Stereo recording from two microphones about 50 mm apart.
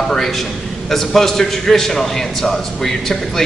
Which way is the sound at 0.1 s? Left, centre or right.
Centre.